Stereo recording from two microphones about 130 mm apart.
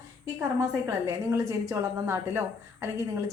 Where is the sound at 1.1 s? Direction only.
25° right (ahead or behind).